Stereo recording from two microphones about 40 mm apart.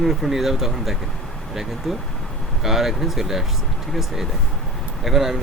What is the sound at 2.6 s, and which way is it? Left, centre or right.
Speech, centre.